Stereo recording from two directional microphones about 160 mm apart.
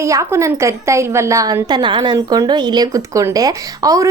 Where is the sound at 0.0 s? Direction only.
20° right (ahead or behind).